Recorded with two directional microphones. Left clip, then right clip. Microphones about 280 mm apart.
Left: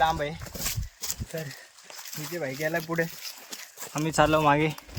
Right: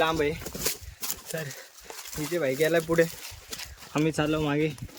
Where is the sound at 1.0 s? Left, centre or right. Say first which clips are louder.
Even; centre.